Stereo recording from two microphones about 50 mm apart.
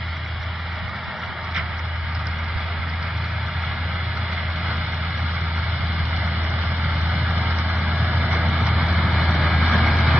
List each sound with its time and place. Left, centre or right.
7.8 s vehicle: right
8.5 s vehicle: centre